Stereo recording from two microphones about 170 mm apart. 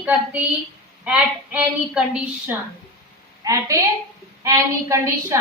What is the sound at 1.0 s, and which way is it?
A woman's voice, 5° right (ahead or behind).